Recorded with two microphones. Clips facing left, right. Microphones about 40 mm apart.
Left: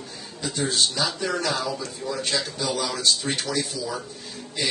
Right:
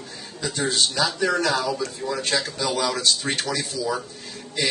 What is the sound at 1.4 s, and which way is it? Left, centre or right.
Speech, right.